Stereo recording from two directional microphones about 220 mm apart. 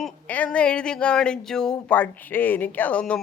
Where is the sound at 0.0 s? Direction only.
5° left (ahead or behind).